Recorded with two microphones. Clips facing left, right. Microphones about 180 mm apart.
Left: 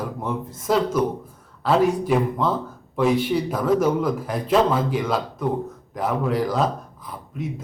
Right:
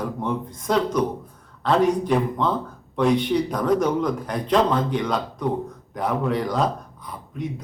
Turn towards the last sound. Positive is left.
turn(degrees=5)  # may be behind; listen again after turning